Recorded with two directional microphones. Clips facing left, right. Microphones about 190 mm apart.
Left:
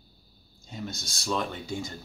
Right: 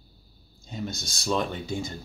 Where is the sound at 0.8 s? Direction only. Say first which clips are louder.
Right 3 dB; 25° right (ahead or behind).